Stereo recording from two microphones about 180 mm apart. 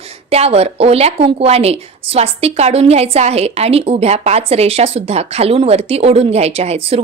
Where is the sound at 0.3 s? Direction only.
35° right (ahead or behind).